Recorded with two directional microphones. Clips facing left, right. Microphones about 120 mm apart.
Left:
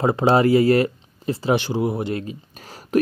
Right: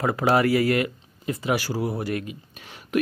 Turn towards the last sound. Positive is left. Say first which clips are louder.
# left 4 dB
turn(degrees=35)  # may be behind; listen again after turning